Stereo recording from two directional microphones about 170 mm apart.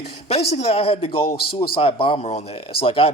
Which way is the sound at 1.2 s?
65° left (ahead or behind).